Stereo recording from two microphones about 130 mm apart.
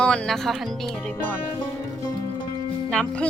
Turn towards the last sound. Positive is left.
turn(degrees=10)  # may be behind; listen again after turning